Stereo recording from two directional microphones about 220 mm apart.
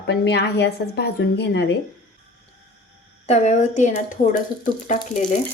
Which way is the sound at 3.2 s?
30° left (ahead or behind).